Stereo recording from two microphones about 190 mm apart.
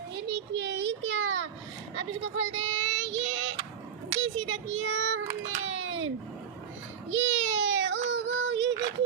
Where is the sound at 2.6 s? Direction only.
80° right.